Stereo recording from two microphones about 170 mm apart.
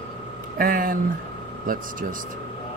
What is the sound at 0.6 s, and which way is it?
Speech, 55° right (ahead or behind).